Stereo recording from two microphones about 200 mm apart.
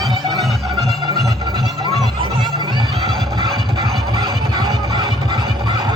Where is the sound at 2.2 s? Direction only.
25° right (ahead or behind).